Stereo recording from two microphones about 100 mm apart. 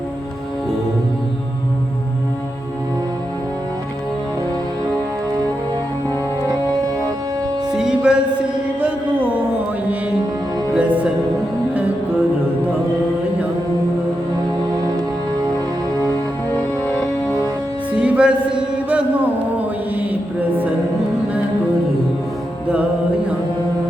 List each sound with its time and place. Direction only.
6.5 s music: 35° right (ahead or behind)
7.7 s music: 5° right (ahead or behind)
10.8 s music: 10° right (ahead or behind)
17.2 s music: 25° left (ahead or behind)
17.9 s music: 10° right (ahead or behind)